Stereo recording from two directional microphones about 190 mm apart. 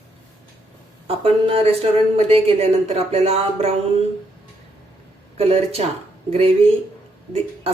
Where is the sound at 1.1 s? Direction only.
30° right (ahead or behind).